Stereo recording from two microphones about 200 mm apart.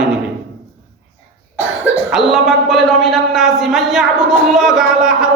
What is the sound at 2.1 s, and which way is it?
A man's voice, centre (ahead or behind).